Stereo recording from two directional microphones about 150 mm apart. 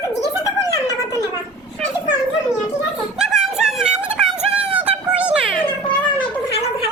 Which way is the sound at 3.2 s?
5° right (ahead or behind).